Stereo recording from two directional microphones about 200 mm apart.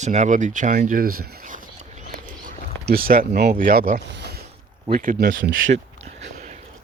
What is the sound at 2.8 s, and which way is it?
Speech, 50° right (ahead or behind).